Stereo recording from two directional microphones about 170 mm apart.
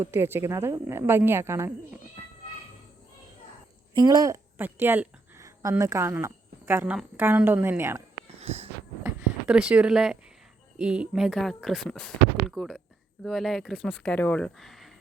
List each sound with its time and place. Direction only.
0.0 s a woman's voice: 15° right (ahead or behind)
3.9 s a woman's voice: 25° right (ahead or behind)
8.4 s wheeze: 40° right (ahead or behind)
9.5 s speech: 5° right (ahead or behind)